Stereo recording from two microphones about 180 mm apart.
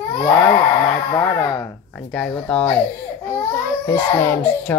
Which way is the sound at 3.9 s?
15° left (ahead or behind).